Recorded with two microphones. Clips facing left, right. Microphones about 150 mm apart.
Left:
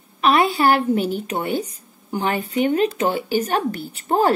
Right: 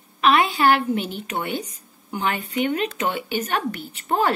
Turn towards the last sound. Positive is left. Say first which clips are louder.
# left 3 dB
turn(degrees=40)  # may be behind; listen again after turning